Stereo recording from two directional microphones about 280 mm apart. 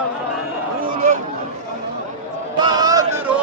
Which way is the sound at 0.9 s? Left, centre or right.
Right.